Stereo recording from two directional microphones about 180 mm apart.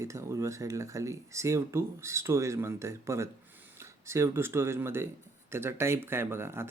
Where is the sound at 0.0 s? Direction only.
15° right (ahead or behind).